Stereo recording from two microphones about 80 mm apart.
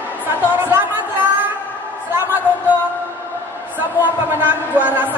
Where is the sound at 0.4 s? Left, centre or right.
Right.